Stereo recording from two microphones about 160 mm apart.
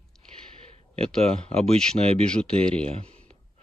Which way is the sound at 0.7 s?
40° right (ahead or behind).